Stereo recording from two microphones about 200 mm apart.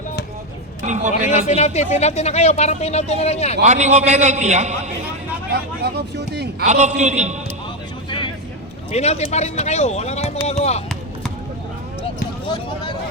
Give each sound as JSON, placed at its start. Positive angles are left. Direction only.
{"t": 0.8, "sound": "a man's voice", "side_deg": -35}
{"t": 1.3, "sound": "speech", "side_deg": 35}
{"t": 3.7, "sound": "a man's voice", "side_deg": -35}
{"t": 5.8, "sound": "speech", "side_deg": -55}
{"t": 6.7, "sound": "a man's voice", "side_deg": -35}
{"t": 8.9, "sound": "speech", "side_deg": 30}